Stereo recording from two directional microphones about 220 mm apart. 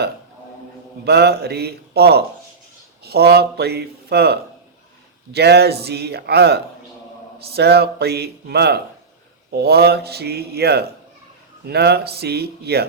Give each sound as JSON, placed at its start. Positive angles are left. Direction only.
{"t": 1.0, "sound": "a man's voice", "side_deg": -45}